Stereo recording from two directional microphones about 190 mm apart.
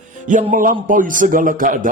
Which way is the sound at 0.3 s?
40° right (ahead or behind).